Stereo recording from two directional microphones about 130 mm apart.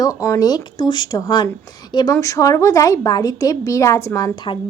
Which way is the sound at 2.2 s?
25° left (ahead or behind).